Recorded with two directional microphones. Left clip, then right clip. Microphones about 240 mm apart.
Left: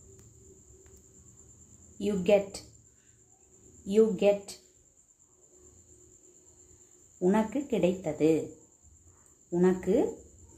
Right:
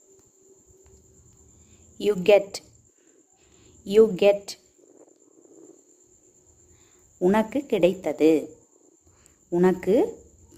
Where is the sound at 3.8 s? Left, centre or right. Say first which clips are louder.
Right 7 dB; right.